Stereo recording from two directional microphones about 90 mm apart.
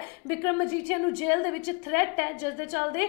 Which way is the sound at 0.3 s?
20° left (ahead or behind).